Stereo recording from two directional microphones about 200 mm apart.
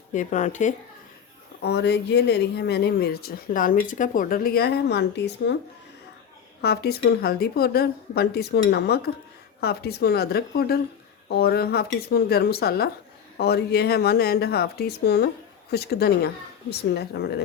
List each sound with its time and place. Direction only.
0.1 s speech: 35° left (ahead or behind)
1.6 s speech: 55° left (ahead or behind)
6.6 s speech: 55° left (ahead or behind)